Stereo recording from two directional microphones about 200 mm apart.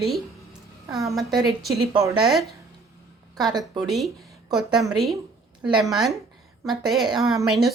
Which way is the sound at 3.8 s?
Centre (ahead or behind).